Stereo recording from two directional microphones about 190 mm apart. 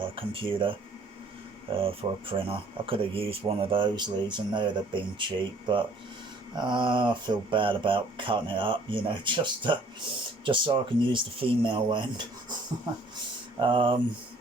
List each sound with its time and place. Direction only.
0.0 s speech: 25° right (ahead or behind)
1.8 s speech: 30° right (ahead or behind)
13.6 s speech: 25° right (ahead or behind)